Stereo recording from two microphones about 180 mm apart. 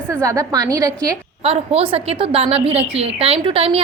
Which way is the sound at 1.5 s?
30° right (ahead or behind).